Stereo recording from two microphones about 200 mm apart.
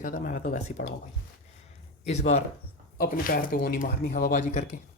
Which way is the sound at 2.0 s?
35° left (ahead or behind).